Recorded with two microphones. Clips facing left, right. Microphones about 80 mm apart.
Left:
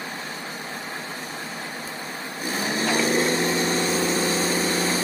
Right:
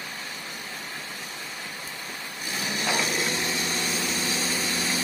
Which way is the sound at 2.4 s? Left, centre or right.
Left.